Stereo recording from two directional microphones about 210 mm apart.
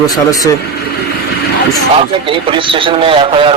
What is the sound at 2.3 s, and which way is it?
A man's voice, 25° right (ahead or behind).